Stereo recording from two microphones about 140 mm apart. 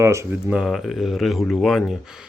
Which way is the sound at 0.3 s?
10° right (ahead or behind).